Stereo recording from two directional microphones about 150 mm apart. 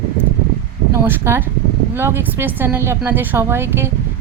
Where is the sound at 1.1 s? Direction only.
15° right (ahead or behind).